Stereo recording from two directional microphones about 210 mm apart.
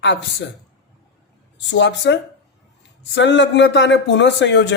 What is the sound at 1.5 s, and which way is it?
Speech, 60° left (ahead or behind).